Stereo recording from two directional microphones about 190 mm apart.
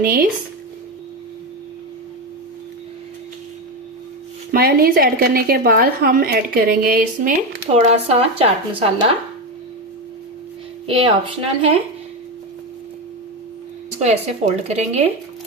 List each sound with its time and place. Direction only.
0.0 s a woman's voice: 50° right (ahead or behind)
4.5 s a woman's voice: 50° right (ahead or behind)
7.7 s speech: 35° right (ahead or behind)
10.8 s a woman's voice: 30° right (ahead or behind)
14.0 s speech: 35° right (ahead or behind)